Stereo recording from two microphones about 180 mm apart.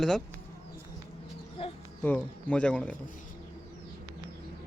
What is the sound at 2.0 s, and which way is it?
Speech, 5° left (ahead or behind).